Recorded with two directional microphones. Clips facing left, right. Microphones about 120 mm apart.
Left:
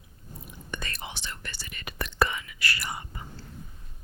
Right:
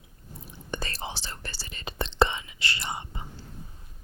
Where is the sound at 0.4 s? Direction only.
30° right (ahead or behind).